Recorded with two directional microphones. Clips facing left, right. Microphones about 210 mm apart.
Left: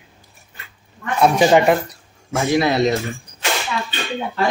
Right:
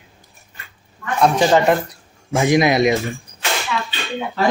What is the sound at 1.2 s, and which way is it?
Speech, 10° left (ahead or behind).